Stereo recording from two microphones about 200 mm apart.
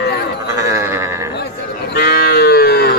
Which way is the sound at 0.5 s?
15° right (ahead or behind).